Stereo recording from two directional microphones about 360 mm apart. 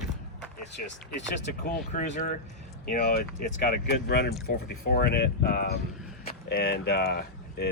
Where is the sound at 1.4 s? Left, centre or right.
Left.